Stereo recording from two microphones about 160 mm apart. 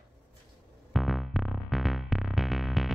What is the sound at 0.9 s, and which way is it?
Music, centre (ahead or behind).